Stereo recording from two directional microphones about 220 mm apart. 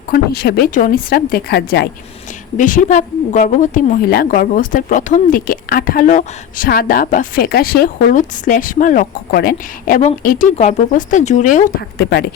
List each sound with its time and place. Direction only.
0.1 s a woman's voice: 45° left (ahead or behind)
2.6 s a woman's voice: 35° left (ahead or behind)